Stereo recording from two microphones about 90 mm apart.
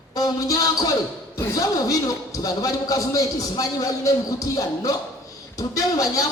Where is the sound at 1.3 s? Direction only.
40° left (ahead or behind).